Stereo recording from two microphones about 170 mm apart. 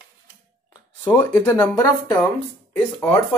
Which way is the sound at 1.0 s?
15° left (ahead or behind).